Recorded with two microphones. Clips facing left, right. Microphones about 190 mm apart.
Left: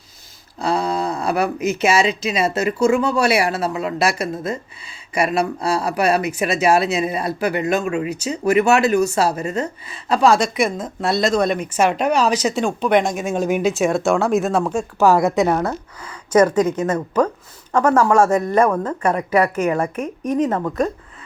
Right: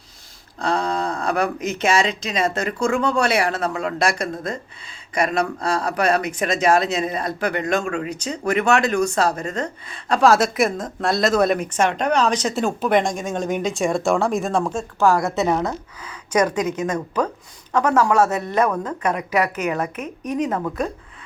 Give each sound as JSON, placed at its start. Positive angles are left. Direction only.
{"t": 0.6, "sound": "speech", "side_deg": 10}
{"t": 11.7, "sound": "speech", "side_deg": 10}
{"t": 15.6, "sound": "a woman's voice", "side_deg": -10}
{"t": 17.7, "sound": "speech", "side_deg": 10}
{"t": 20.0, "sound": "speech", "side_deg": 30}
{"t": 20.7, "sound": "speech", "side_deg": 0}